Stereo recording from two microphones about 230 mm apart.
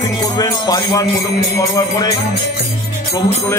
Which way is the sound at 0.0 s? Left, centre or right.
Centre.